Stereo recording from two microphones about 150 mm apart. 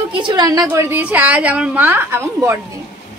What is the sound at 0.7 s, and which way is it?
A woman's voice, 15° right (ahead or behind).